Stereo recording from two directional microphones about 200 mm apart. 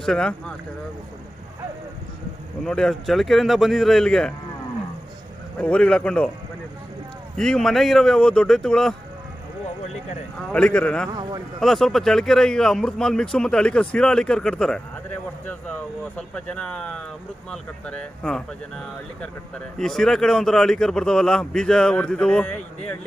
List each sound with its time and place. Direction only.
0.0 s speech: 5° left (ahead or behind)
2.6 s speech: 5° left (ahead or behind)
5.6 s speech: 5° left (ahead or behind)
7.3 s speech: 5° left (ahead or behind)
10.5 s speech: 5° left (ahead or behind)
11.1 s speech: 20° right (ahead or behind)
11.6 s speech: centre (ahead or behind)